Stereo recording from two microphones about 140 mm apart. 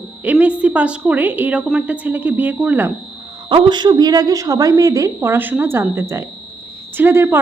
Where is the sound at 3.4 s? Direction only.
35° right (ahead or behind).